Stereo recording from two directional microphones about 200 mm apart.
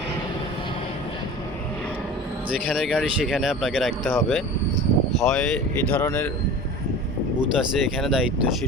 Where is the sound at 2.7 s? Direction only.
Centre (ahead or behind).